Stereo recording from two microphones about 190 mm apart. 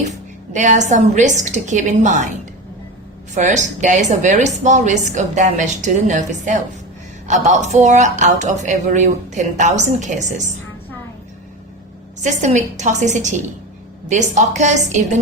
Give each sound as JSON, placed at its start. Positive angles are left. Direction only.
{"t": 0.5, "sound": "speech", "side_deg": -40}
{"t": 3.3, "sound": "speech", "side_deg": -40}
{"t": 12.2, "sound": "speech", "side_deg": -40}